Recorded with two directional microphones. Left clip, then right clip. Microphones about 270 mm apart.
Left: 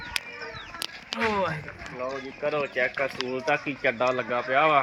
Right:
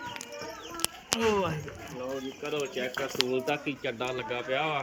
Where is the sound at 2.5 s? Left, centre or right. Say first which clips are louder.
Left 5 dB; left.